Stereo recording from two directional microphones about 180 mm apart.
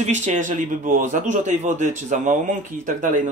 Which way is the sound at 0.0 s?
40° right (ahead or behind).